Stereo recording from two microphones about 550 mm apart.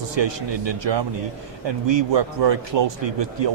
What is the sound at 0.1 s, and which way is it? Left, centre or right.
Speech, right.